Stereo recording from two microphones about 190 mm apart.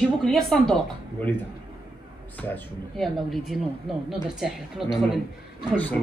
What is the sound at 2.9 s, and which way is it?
A man's voice, centre (ahead or behind).